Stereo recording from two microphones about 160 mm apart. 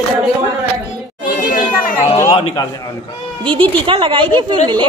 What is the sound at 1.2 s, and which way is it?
Children playing, 60° left (ahead or behind).